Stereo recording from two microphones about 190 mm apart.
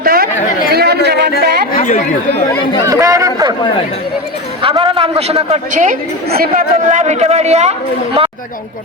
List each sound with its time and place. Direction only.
0.0 s chatter: 50° right (ahead or behind)
1.7 s chatter: 40° left (ahead or behind)
2.8 s chatter: 15° right (ahead or behind)
4.6 s a woman's voice: 25° right (ahead or behind)